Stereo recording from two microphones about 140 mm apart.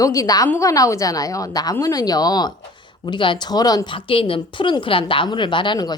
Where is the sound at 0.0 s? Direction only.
25° left (ahead or behind).